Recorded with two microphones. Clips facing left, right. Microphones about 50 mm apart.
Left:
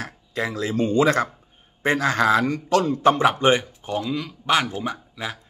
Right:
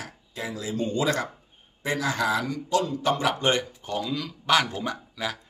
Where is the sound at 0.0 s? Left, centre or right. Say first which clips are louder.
Left 8 dB; left; by 5.4 s centre.